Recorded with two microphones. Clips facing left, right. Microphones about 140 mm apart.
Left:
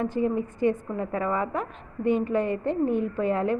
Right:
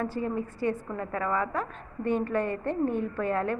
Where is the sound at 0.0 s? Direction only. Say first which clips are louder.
Left 5 dB; 20° left (ahead or behind).